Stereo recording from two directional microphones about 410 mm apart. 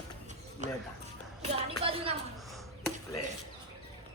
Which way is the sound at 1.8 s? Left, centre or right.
Centre.